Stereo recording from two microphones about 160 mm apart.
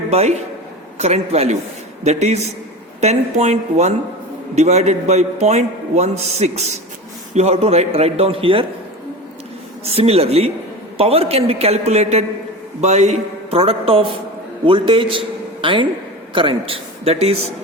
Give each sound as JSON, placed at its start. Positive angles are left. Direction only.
{"t": 0.1, "sound": "a man's voice", "side_deg": -45}
{"t": 9.8, "sound": "a man's voice", "side_deg": -40}